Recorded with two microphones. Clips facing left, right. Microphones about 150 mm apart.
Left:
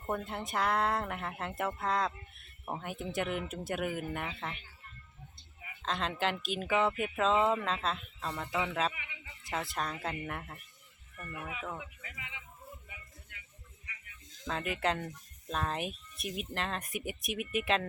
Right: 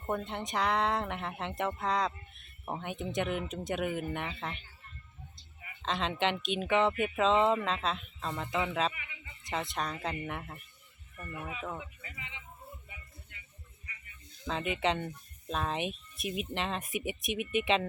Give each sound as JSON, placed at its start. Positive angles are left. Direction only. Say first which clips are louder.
{"t": 0.0, "sound": "speech", "louder": "right 1 dB", "side_deg": 0}
{"t": 5.8, "sound": "speech", "louder": "right 2 dB", "side_deg": 0}
{"t": 8.9, "sound": "a sound", "louder": "even", "side_deg": 15}
{"t": 9.4, "sound": "speech", "louder": "right 1 dB", "side_deg": 0}
{"t": 14.4, "sound": "speech", "louder": "right 2 dB", "side_deg": 0}